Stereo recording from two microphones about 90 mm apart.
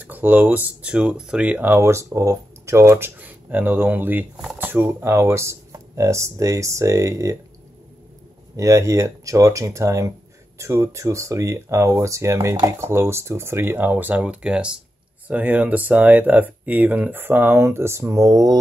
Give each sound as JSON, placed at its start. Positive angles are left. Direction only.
{"t": 0.0, "sound": "speech", "side_deg": -20}
{"t": 3.2, "sound": "speech", "side_deg": -20}
{"t": 8.5, "sound": "speech", "side_deg": -35}